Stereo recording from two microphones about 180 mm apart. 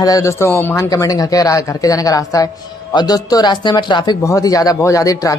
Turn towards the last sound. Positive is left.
turn(degrees=20)  # may be behind; listen again after turning